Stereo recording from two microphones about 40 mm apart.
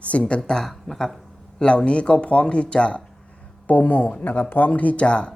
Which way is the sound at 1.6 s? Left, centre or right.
Left.